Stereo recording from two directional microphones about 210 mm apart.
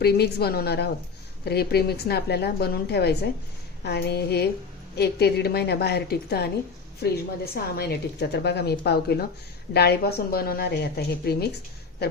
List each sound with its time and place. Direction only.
0.0 s a woman's voice: 50° left (ahead or behind)